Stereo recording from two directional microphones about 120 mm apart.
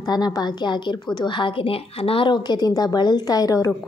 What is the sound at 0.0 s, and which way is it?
A woman's voice, 30° left (ahead or behind).